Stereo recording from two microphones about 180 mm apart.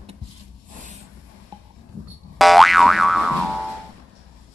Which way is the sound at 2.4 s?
Centre (ahead or behind).